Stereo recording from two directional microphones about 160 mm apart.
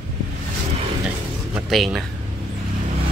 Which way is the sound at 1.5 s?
Centre (ahead or behind).